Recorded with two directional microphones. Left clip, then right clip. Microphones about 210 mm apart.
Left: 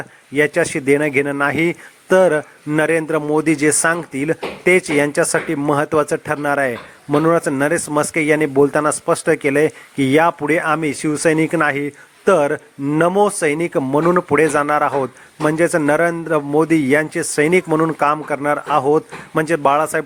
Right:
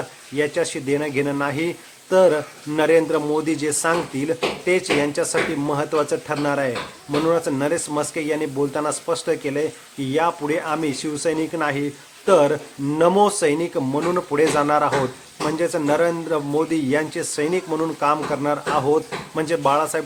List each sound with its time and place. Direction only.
0.3 s speech: 35° left (ahead or behind)